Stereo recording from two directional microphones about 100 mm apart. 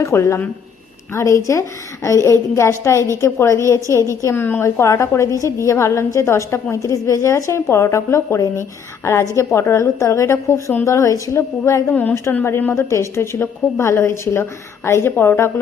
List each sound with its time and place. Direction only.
0.0 s a woman's voice: 30° left (ahead or behind)
4.4 s a woman's voice: 20° left (ahead or behind)
11.9 s a woman's voice: 15° left (ahead or behind)